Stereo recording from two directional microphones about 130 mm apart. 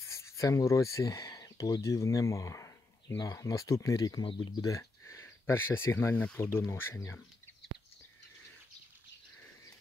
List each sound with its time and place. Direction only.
0.1 s speech: 25° left (ahead or behind)